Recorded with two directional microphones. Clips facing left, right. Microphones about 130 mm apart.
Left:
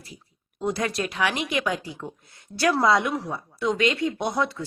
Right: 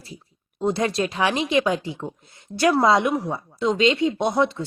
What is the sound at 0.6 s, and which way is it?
A woman's voice, 25° right (ahead or behind).